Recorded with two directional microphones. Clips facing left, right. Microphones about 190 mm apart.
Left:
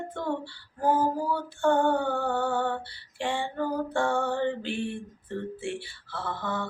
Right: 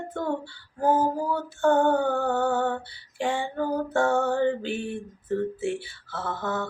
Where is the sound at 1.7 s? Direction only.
Centre (ahead or behind).